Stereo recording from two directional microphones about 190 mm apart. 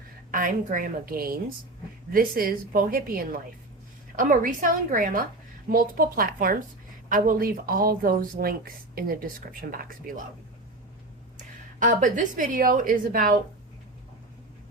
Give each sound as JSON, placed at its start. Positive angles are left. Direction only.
{"t": 0.3, "sound": "speech", "side_deg": -45}
{"t": 11.3, "sound": "a woman's voice", "side_deg": -45}